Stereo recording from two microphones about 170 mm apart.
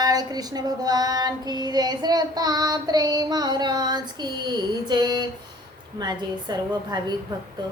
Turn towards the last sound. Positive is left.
turn(degrees=-25)  # may be behind; listen again after turning